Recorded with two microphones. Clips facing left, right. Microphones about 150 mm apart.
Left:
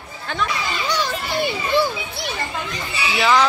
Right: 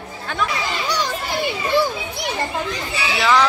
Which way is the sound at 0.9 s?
15° right (ahead or behind).